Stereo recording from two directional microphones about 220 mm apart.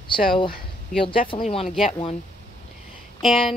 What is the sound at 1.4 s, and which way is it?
Speech, 25° left (ahead or behind).